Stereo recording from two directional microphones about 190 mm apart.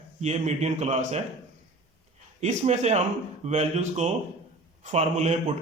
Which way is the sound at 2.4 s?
35° right (ahead or behind).